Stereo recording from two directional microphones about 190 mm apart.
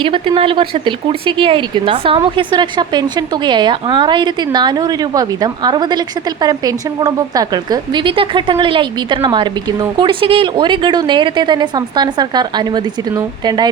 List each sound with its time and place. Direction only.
0.0 s speech: 25° right (ahead or behind)